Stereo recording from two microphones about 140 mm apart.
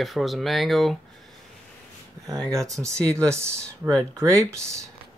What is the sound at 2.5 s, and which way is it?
Speech, 20° right (ahead or behind).